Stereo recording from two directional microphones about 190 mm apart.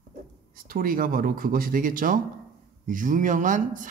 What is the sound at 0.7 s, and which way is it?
Speech, 50° right (ahead or behind).